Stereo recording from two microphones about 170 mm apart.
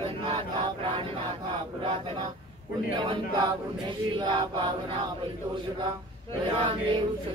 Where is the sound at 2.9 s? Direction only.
25° right (ahead or behind).